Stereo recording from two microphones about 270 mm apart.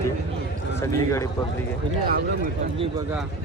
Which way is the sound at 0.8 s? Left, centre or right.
Centre.